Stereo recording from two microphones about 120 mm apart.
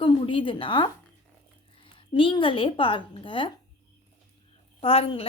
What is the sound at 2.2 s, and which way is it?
Speech, 45° left (ahead or behind).